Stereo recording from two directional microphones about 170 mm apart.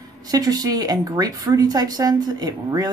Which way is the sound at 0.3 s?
20° right (ahead or behind).